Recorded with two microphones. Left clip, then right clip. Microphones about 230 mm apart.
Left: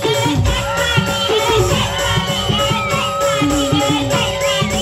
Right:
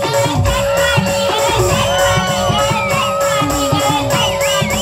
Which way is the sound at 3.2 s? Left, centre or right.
Right.